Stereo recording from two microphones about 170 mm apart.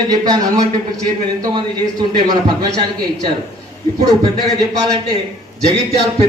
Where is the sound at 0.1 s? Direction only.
25° right (ahead or behind).